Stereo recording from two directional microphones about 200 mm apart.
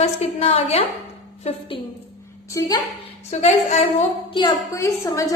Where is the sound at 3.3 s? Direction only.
35° left (ahead or behind).